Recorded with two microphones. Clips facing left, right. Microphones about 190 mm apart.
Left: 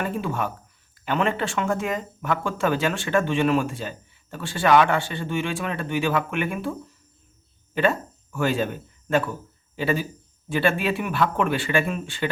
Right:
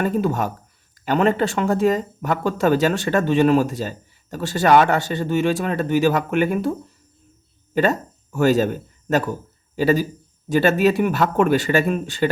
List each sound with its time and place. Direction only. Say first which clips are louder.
0.0 s speech: right 6 dB; 40° right (ahead or behind)
7.8 s speech: right 3 dB; 40° right (ahead or behind)